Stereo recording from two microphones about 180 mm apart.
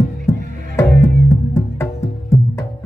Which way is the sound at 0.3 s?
15° left (ahead or behind).